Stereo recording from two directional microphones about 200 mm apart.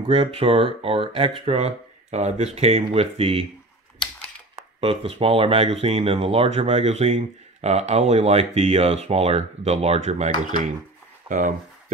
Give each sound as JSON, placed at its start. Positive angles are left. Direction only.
{"t": 0.0, "sound": "speech", "side_deg": -25}
{"t": 4.6, "sound": "speech", "side_deg": -30}